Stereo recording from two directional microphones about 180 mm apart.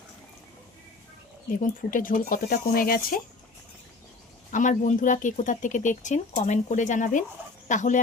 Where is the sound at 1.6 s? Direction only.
50° left (ahead or behind).